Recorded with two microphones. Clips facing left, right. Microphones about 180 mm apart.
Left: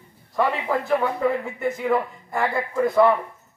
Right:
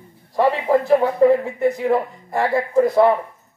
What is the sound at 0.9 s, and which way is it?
Speech, 35° right (ahead or behind).